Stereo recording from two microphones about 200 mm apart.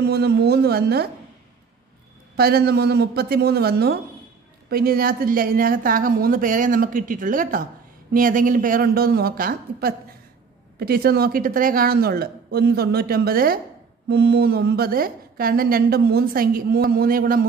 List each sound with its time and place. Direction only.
0.0 s a woman's voice: 55° right (ahead or behind)
2.3 s a woman's voice: 50° right (ahead or behind)